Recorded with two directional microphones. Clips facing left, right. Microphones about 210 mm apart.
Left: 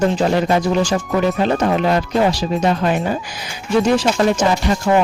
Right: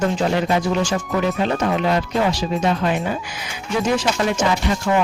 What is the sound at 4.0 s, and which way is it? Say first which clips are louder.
Speech: left 4 dB; 40° left (ahead or behind).